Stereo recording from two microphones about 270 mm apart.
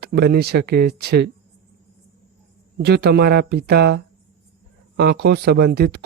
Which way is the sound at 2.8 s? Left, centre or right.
Right.